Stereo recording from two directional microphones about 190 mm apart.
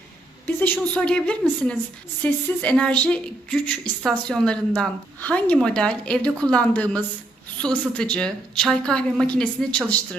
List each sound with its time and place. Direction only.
0.4 s a woman's voice: 10° left (ahead or behind)